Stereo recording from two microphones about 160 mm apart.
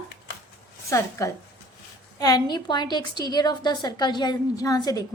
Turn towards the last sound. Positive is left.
turn(degrees=25)  # may be behind; listen again after turning